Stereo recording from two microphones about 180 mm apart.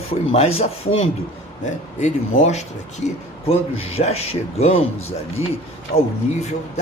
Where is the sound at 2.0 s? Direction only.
40° left (ahead or behind).